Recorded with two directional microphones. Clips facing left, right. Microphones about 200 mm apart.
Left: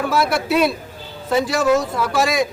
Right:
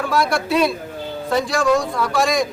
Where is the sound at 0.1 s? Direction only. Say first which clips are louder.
Right 1 dB; 5° left (ahead or behind).